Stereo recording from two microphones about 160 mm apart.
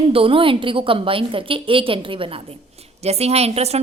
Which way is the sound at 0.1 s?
35° right (ahead or behind).